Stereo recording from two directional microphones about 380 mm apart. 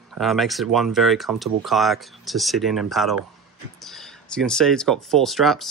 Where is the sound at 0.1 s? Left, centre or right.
Centre.